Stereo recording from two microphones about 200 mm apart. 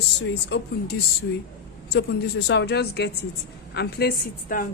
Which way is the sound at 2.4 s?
60° left (ahead or behind).